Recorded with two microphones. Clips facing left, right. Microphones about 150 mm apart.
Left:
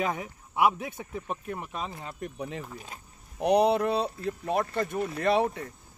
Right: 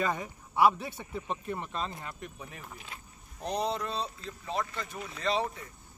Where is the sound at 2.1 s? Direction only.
55° left (ahead or behind).